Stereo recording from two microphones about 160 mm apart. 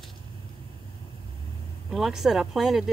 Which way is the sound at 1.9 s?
Centre (ahead or behind).